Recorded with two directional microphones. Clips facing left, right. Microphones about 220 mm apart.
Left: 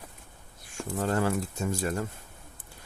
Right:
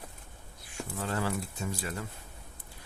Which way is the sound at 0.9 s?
45° left (ahead or behind).